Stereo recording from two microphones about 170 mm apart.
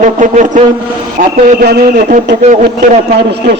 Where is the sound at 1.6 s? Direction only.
70° right (ahead or behind).